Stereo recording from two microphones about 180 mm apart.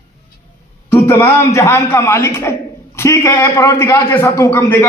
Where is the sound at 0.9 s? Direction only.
15° left (ahead or behind).